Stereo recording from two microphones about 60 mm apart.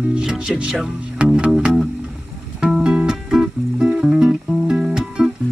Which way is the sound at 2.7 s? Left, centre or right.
Centre.